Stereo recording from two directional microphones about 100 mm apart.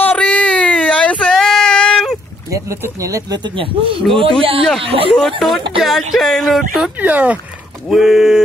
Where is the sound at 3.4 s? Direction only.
55° right (ahead or behind).